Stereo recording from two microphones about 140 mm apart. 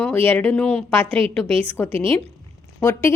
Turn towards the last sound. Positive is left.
turn(degrees=20)  # may be behind; listen again after turning